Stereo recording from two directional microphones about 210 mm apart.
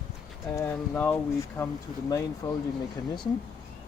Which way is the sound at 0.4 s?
15° left (ahead or behind).